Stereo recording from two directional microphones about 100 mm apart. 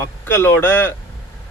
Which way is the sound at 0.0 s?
25° left (ahead or behind).